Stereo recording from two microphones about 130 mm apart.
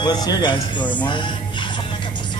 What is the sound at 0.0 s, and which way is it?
A man's voice, 30° left (ahead or behind).